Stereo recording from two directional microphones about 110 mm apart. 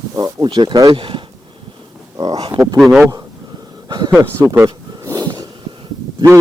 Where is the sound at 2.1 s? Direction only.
35° right (ahead or behind).